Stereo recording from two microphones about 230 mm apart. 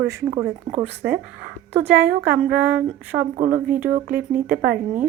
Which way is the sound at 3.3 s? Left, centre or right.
Right.